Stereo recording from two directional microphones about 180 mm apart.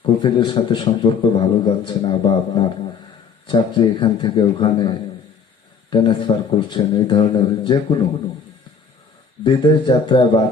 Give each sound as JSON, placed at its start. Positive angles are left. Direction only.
{"t": 0.0, "sound": "a man's voice", "side_deg": 25}
{"t": 9.4, "sound": "a man's voice", "side_deg": 25}